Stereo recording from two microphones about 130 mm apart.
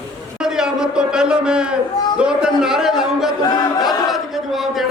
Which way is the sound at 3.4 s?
30° left (ahead or behind).